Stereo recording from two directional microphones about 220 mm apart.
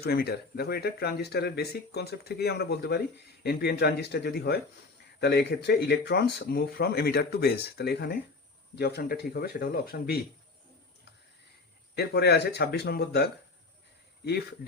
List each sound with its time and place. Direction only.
0.0 s speech: 45° left (ahead or behind)
11.9 s speech: 45° left (ahead or behind)
14.3 s speech: 45° left (ahead or behind)